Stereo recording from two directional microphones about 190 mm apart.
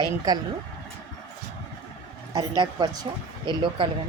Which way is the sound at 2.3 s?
20° right (ahead or behind).